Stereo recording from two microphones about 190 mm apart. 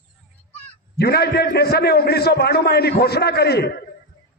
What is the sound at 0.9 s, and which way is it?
A man's voice, 55° left (ahead or behind).